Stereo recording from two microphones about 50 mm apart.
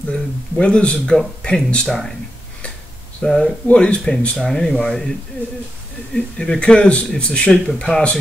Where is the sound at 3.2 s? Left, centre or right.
Centre.